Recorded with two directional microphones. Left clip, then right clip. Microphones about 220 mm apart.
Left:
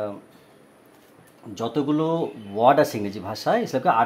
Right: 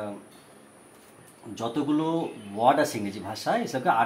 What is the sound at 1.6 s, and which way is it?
Speech, 45° left (ahead or behind).